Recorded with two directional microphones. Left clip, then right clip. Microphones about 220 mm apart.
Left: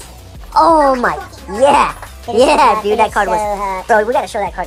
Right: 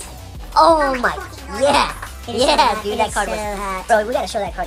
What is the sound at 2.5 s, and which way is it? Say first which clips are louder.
Speech: left 5 dB; 25° left (ahead or behind).